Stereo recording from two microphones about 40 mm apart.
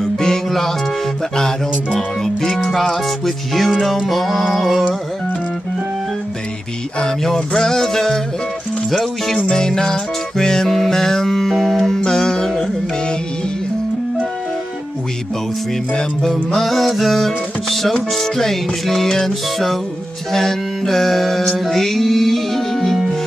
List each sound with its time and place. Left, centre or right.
0.0 s music: centre
2.0 s music: centre
7.2 s music: centre
9.5 s music: centre
16.5 s music: centre
20.3 s mantra: centre